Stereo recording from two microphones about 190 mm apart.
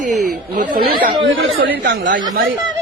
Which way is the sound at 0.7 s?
50° right (ahead or behind).